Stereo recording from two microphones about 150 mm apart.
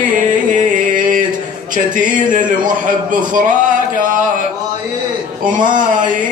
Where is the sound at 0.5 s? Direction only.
65° right (ahead or behind).